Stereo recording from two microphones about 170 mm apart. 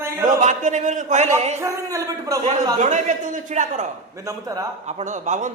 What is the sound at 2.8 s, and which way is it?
Speech, 45° right (ahead or behind).